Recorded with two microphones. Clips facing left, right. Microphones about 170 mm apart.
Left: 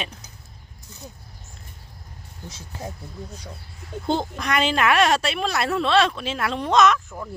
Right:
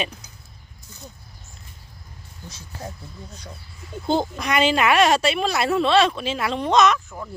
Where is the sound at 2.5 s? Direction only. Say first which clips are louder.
Left 1 dB; 25° left (ahead or behind).